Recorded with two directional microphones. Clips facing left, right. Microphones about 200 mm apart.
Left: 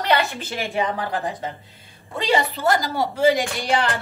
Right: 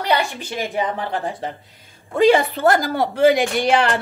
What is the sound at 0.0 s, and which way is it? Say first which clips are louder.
A woman's voice: right 1 dB; 15° right (ahead or behind).